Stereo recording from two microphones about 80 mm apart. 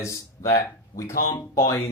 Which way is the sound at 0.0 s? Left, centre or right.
Left.